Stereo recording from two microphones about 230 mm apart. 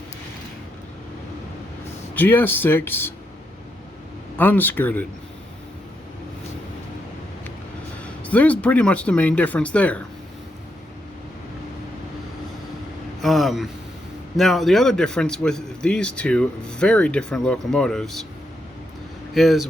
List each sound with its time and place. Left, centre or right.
2.1 s speech: centre
4.4 s speech: centre
8.2 s a man's voice: centre
13.2 s a man's voice: centre
19.3 s speech: centre